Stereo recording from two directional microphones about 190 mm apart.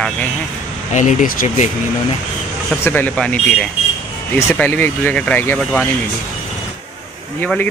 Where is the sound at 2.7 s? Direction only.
10° left (ahead or behind).